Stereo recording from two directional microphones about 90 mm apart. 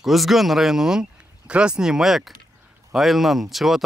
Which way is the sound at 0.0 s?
Centre (ahead or behind).